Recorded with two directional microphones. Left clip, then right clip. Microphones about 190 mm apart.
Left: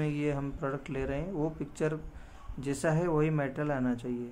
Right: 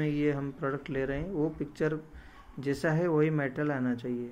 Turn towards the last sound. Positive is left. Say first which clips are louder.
# right 1 dB
turn(degrees=0)  # may be behind; listen again after turning